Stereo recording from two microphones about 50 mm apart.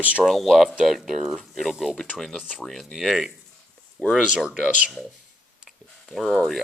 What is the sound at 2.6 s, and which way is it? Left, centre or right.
Speech, centre.